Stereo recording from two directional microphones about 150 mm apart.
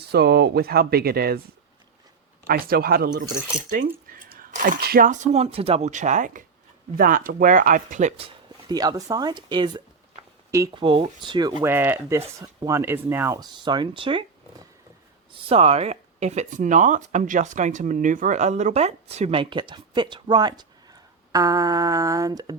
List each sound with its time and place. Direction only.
0.0 s speech: 90° right
2.5 s speech: 85° right
3.7 s speech: 65° right (ahead or behind)
8.2 s speech: 25° right (ahead or behind)
11.6 s speech: 15° right (ahead or behind); by 14.3 s 35° right (ahead or behind)
15.4 s speech: 40° right (ahead or behind)